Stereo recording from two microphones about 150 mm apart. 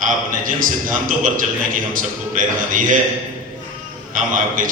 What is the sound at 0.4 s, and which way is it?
A man's voice, 65° right (ahead or behind).